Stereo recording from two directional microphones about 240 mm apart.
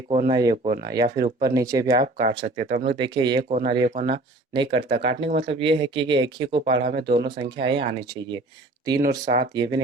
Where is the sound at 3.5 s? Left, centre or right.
Right.